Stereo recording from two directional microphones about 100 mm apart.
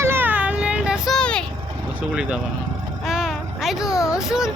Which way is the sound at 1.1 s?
10° left (ahead or behind).